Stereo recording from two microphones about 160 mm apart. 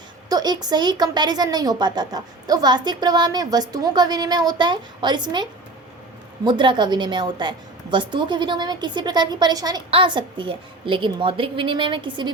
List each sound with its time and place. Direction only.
0.3 s a woman's voice: 25° right (ahead or behind)